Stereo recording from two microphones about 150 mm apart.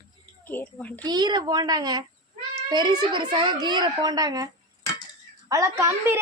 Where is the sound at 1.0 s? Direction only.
30° right (ahead or behind).